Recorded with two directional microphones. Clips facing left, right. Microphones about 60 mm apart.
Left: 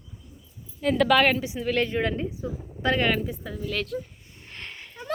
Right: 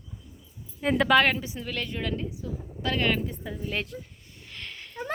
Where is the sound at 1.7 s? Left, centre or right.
Left.